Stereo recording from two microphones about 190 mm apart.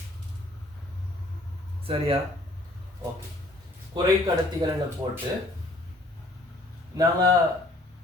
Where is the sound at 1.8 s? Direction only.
30° right (ahead or behind).